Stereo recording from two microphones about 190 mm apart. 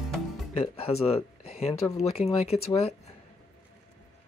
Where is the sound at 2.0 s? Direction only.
35° left (ahead or behind).